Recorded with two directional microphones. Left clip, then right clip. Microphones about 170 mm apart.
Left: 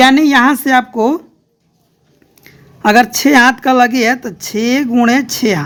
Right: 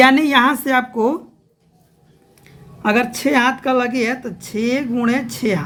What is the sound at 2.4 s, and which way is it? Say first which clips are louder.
A woman's voice: left 7 dB; 45° left (ahead or behind).